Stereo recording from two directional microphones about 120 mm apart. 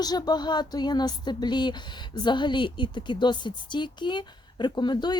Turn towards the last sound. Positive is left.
turn(degrees=40)  # may be behind; listen again after turning